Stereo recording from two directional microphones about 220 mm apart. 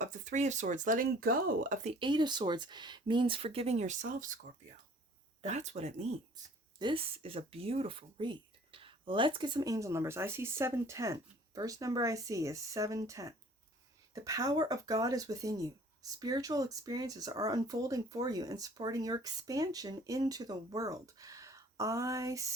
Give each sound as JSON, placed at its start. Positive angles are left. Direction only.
{"t": 0.0, "sound": "speech", "side_deg": -35}
{"t": 5.4, "sound": "speech", "side_deg": -30}
{"t": 6.3, "sound": "speech", "side_deg": -20}